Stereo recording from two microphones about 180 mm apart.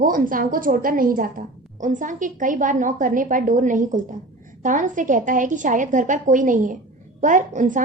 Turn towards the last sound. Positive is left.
turn(degrees=-45)  # may be behind; listen again after turning